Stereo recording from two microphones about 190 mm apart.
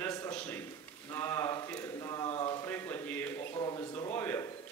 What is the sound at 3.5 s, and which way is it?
Speech, 20° left (ahead or behind).